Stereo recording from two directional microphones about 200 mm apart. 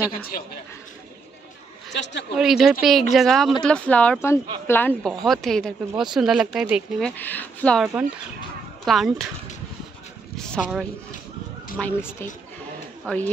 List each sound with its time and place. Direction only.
1.9 s a woman's voice: 60° left (ahead or behind)
2.3 s a woman's voice: centre (ahead or behind)
7.1 s a woman's voice: 10° left (ahead or behind)
10.3 s a woman's voice: 5° left (ahead or behind)
11.8 s speech: 10° left (ahead or behind)